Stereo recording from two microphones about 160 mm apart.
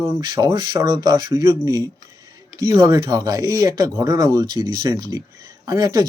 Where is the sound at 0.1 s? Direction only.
25° right (ahead or behind).